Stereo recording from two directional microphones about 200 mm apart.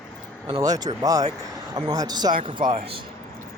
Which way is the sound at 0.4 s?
20° right (ahead or behind).